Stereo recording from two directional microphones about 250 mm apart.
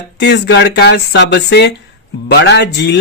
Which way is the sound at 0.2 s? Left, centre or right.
Left.